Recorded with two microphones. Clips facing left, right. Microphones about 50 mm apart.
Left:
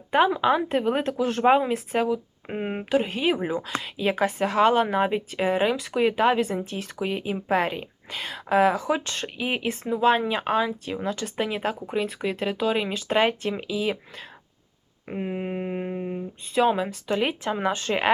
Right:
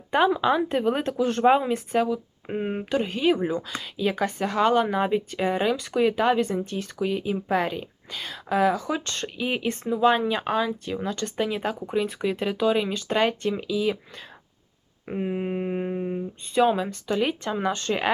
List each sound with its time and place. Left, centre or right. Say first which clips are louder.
0.1 s a woman's voice: left 1 dB; centre
7.0 s a woman's voice: right 2 dB; left
11.8 s a woman's voice: right 1 dB; centre